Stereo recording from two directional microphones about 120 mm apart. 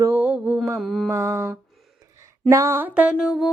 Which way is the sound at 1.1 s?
25° right (ahead or behind).